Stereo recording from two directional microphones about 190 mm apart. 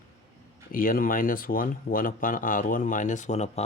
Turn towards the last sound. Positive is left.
turn(degrees=35)  # may be behind; listen again after turning